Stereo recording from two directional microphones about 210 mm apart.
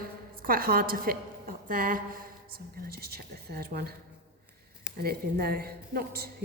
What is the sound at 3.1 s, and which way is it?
Speech, 45° right (ahead or behind).